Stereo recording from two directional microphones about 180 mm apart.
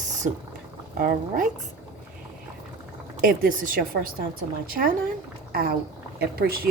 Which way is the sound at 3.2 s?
55° right (ahead or behind).